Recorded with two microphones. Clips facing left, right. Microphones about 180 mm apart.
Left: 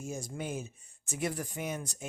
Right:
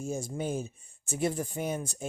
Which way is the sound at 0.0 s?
30° right (ahead or behind).